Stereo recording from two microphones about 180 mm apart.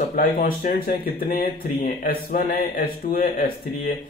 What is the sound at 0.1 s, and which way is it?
Speech, 55° left (ahead or behind).